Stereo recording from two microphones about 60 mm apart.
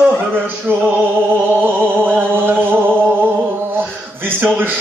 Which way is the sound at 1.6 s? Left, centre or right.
Right.